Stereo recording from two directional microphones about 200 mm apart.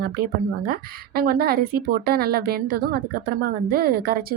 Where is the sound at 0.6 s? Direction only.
50° right (ahead or behind).